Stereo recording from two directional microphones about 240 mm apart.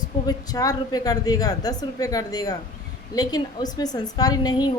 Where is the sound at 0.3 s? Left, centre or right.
Centre.